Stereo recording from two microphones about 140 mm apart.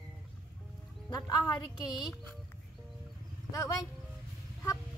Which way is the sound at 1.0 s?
25° left (ahead or behind).